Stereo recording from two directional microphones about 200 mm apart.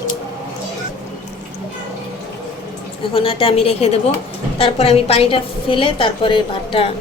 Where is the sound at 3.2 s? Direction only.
30° left (ahead or behind).